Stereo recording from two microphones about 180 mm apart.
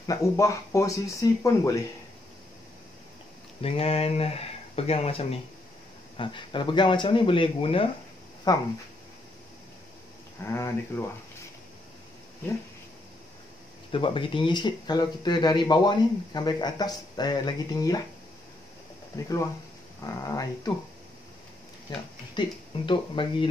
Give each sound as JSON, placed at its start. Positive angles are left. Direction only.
{"t": 0.0, "sound": "speech", "side_deg": 20}
{"t": 3.6, "sound": "speech", "side_deg": 35}
{"t": 10.4, "sound": "speech", "side_deg": 15}
{"t": 13.9, "sound": "speech", "side_deg": 30}
{"t": 19.1, "sound": "speech", "side_deg": 15}
{"t": 21.9, "sound": "speech", "side_deg": 25}